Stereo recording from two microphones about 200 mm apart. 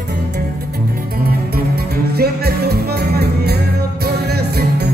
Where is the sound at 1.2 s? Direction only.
50° right (ahead or behind).